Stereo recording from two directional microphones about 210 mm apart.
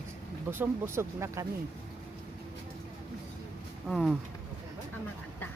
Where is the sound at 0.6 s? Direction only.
15° right (ahead or behind).